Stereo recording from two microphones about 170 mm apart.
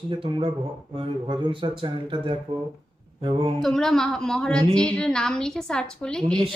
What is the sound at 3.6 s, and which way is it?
A woman's voice, centre (ahead or behind).